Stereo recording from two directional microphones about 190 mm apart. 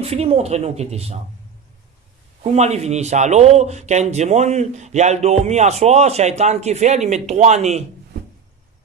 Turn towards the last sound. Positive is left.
turn(degrees=-35)  # may be behind; listen again after turning